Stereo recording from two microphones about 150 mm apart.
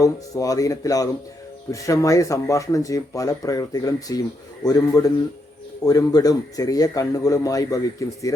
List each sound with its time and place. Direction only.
0.0 s a man's voice: 25° left (ahead or behind)